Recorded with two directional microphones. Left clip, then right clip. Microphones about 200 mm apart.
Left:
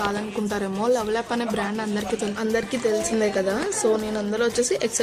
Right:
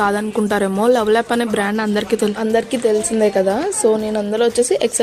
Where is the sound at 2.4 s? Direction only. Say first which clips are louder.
Right 7 dB; 20° right (ahead or behind).